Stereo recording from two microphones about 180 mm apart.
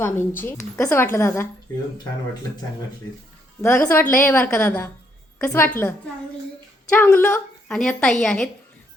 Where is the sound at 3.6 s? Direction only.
15° left (ahead or behind).